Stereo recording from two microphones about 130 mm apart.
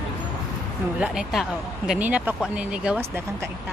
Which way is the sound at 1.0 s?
5° right (ahead or behind).